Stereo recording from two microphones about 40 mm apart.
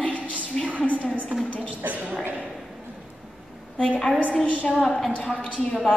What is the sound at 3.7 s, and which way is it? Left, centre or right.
Speech, left.